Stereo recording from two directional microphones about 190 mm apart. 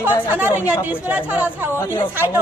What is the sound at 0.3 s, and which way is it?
A woman's voice, 10° right (ahead or behind).